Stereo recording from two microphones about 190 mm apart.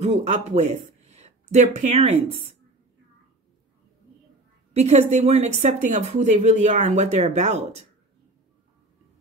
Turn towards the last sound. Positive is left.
turn(degrees=-35)  # may be behind; listen again after turning